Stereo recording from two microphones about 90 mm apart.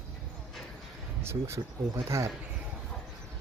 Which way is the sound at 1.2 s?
30° right (ahead or behind).